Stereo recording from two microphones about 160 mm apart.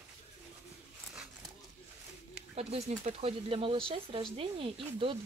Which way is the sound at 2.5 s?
40° right (ahead or behind).